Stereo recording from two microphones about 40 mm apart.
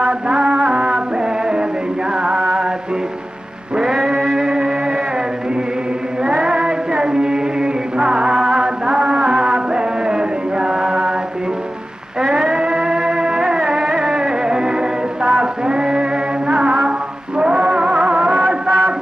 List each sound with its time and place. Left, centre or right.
0.0 s music: right
2.2 s a sound: right
3.7 s music: centre
6.2 s female singing: right
12.2 s music: centre